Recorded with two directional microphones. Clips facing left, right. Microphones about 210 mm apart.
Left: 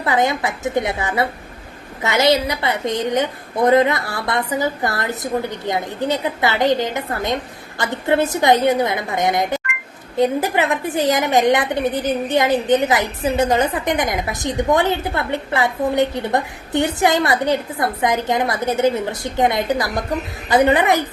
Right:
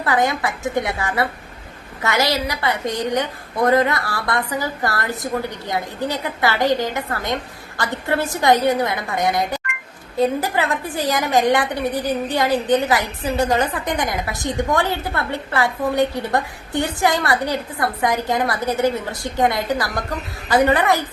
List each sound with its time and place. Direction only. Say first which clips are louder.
0.0 s a woman's voice: left 1 dB; 20° left (ahead or behind)